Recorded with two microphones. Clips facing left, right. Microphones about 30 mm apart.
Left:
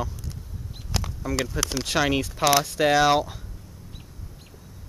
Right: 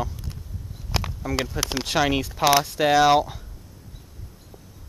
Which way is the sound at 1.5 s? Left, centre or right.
Centre.